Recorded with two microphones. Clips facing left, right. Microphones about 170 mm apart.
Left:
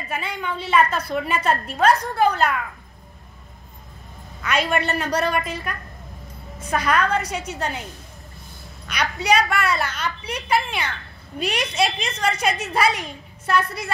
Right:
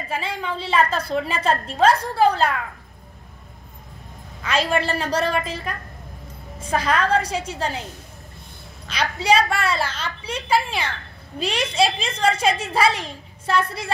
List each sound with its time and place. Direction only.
0.1 s a woman's voice: 30° right (ahead or behind)
4.4 s a woman's voice: 30° right (ahead or behind)
8.8 s a woman's voice: 30° right (ahead or behind)